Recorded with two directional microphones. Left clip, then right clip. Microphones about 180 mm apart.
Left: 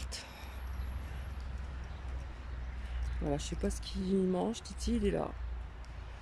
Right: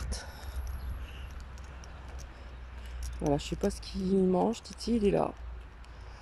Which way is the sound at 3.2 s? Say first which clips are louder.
Right 6 dB; 10° right (ahead or behind).